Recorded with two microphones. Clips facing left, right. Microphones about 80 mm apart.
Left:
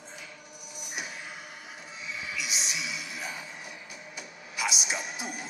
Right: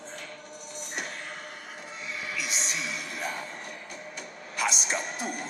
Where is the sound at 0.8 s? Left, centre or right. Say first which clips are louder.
Right 2 dB; centre.